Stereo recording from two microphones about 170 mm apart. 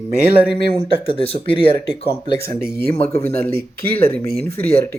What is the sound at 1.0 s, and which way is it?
Speech, 35° left (ahead or behind).